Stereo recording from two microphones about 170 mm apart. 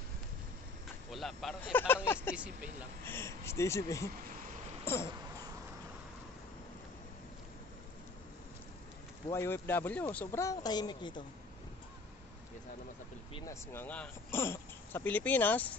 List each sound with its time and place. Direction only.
1.1 s speech: centre (ahead or behind)
2.3 s speech: 5° right (ahead or behind)
3.1 s speech: 15° left (ahead or behind)
4.8 s a sound: 15° left (ahead or behind)
9.3 s speech: 15° left (ahead or behind)
13.5 s speech: 15° left (ahead or behind)